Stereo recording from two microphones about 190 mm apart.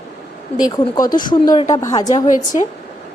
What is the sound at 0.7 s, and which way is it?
A woman's voice, 20° left (ahead or behind).